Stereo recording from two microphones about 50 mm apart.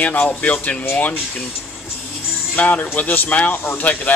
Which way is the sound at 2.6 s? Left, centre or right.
Left.